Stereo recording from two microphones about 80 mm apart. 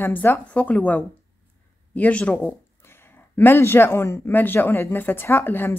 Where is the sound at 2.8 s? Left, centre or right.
Left.